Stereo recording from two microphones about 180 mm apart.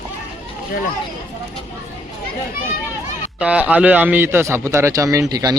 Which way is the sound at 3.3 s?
5° right (ahead or behind).